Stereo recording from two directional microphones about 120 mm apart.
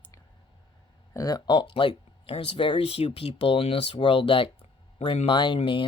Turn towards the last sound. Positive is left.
turn(degrees=45)  # may be behind; listen again after turning